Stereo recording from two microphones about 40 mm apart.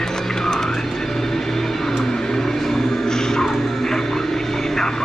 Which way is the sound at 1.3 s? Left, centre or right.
Centre.